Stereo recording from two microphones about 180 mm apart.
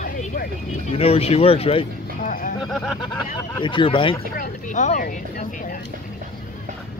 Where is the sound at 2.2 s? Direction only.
50° left (ahead or behind).